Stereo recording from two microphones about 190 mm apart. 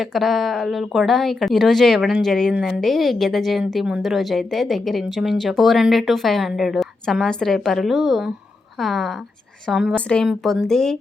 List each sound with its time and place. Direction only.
0.0 s speech: centre (ahead or behind)